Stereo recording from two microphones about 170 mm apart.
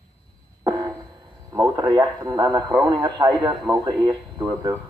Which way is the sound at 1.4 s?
25° right (ahead or behind).